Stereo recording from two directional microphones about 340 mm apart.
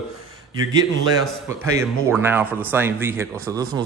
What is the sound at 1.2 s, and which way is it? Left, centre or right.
Speech, centre.